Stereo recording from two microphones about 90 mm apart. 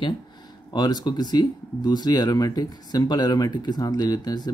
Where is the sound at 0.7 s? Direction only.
50° left (ahead or behind).